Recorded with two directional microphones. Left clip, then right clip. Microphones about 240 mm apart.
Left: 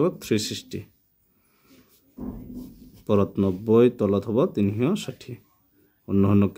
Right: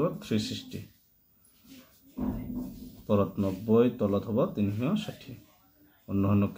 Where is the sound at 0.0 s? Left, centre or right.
Left.